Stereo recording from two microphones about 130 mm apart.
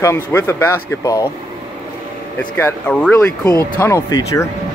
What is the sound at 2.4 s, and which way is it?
Speech, 15° left (ahead or behind).